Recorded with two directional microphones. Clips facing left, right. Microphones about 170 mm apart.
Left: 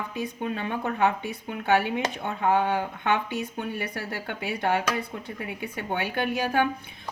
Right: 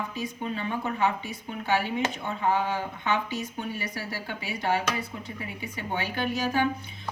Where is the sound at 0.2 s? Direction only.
55° left (ahead or behind).